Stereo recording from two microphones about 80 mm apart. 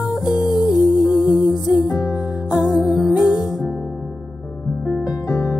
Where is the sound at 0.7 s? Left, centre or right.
Left.